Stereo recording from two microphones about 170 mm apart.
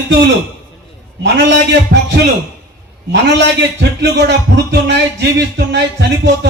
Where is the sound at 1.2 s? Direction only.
90° right.